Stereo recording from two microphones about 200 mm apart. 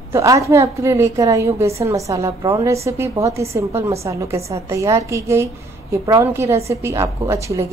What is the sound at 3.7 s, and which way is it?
Speech, 30° right (ahead or behind).